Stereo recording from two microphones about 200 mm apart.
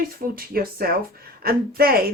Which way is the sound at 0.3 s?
50° right (ahead or behind).